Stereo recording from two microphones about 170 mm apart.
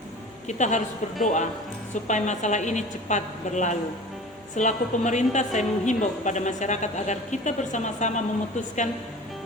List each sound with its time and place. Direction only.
0.4 s a woman's voice: 45° left (ahead or behind)